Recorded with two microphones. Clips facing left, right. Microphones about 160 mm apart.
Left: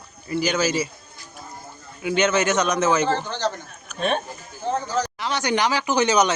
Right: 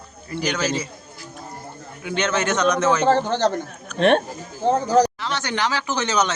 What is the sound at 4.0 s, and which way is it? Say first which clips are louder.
Speech: right 7 dB; 85° right.